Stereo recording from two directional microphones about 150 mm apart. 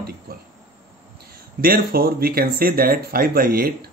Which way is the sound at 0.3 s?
90° right.